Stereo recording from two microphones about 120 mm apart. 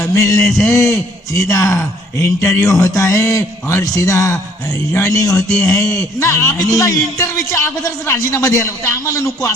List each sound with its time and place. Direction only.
0.0 s a man's voice: 25° left (ahead or behind)